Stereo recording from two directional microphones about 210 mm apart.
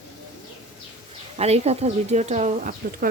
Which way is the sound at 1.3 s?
30° right (ahead or behind).